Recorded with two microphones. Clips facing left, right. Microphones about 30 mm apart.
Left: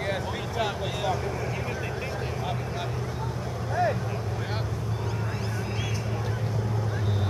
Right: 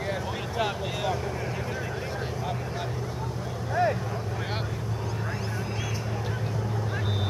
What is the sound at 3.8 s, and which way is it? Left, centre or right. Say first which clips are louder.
Vehicle: right 1 dB; centre.